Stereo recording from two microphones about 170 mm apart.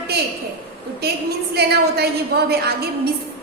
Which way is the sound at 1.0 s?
70° right (ahead or behind).